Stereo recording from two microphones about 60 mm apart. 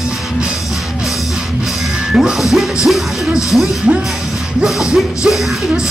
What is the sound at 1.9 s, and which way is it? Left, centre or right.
Music, centre.